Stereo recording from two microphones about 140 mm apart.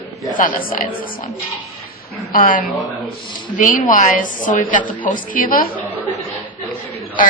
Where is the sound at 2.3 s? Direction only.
75° left (ahead or behind).